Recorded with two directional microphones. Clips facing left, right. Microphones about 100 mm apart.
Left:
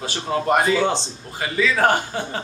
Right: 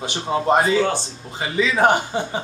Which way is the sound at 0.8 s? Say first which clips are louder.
Right 1 dB; 20° left (ahead or behind).